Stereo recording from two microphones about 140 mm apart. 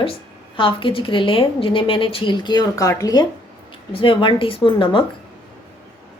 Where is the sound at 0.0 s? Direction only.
40° left (ahead or behind).